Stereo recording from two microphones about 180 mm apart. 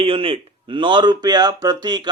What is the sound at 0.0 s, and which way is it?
Speech, 30° right (ahead or behind).